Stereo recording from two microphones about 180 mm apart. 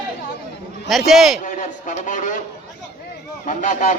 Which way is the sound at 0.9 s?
Centre (ahead or behind).